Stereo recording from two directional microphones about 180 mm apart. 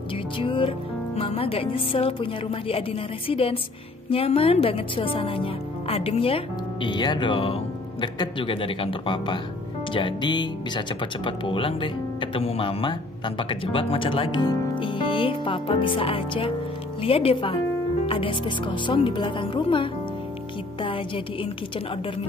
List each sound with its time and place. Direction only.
0.4 s speech: 30° left (ahead or behind)